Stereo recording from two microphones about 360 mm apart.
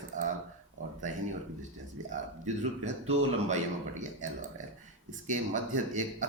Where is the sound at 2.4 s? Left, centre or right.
Centre.